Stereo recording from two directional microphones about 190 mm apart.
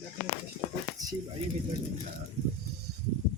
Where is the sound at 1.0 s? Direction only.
20° right (ahead or behind).